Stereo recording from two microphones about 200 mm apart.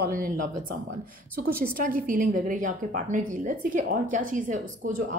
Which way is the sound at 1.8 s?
45° right (ahead or behind).